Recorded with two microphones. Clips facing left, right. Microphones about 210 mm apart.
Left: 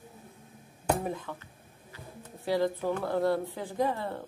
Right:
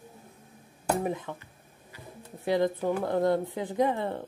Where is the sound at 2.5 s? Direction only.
20° right (ahead or behind).